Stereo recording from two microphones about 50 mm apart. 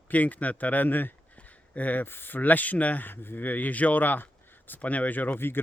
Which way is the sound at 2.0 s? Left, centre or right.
Left.